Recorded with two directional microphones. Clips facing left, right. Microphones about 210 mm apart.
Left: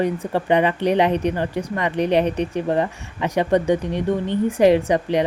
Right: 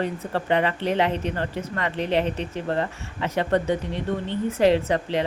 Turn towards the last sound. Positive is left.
turn(degrees=15)  # may be behind; listen again after turning